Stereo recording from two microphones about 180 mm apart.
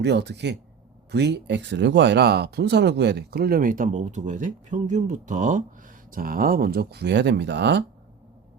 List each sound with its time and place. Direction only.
0.0 s speech: 70° right (ahead or behind)